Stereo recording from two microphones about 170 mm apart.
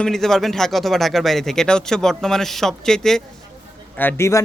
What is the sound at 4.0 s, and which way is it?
Speech, 15° left (ahead or behind).